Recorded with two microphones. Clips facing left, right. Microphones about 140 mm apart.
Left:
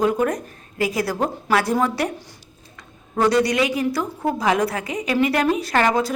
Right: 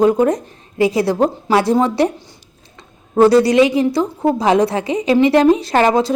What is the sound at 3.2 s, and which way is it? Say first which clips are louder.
A woman's voice: right 8 dB; 30° right (ahead or behind).